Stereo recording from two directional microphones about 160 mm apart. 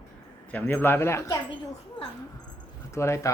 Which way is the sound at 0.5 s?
10° left (ahead or behind).